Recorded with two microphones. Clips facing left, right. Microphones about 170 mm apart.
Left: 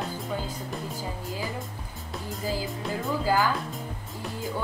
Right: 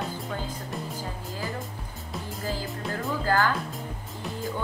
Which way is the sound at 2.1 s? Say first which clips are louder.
Left 1 dB; centre (ahead or behind).